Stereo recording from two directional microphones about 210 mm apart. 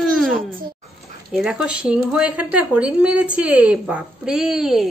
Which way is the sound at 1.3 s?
Centre (ahead or behind).